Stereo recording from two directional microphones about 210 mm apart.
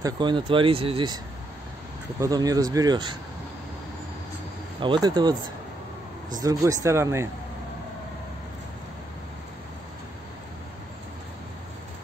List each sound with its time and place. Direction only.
0.0 s speech: 20° right (ahead or behind)
4.7 s speech: 25° right (ahead or behind)
6.4 s speech: 15° right (ahead or behind)